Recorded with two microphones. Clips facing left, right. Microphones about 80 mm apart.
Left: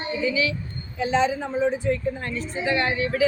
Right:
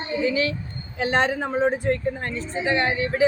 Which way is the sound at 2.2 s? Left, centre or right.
Right.